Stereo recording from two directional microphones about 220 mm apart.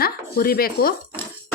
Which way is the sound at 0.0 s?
45° left (ahead or behind).